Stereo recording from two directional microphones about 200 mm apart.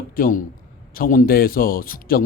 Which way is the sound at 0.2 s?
40° left (ahead or behind).